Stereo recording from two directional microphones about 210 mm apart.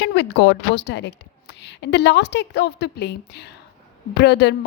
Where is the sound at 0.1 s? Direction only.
55° left (ahead or behind).